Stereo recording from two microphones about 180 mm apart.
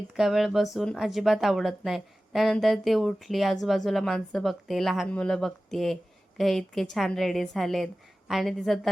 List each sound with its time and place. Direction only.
0.2 s speech: centre (ahead or behind)